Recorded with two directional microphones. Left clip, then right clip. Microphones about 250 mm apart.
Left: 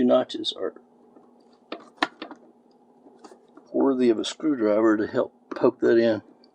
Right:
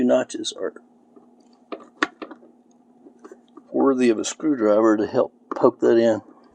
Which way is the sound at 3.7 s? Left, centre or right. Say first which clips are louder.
Right 3 dB; right.